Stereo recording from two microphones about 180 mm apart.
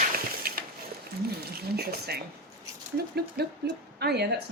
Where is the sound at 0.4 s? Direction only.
55° right (ahead or behind).